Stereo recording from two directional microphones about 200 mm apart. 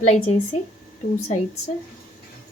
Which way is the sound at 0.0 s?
35° left (ahead or behind).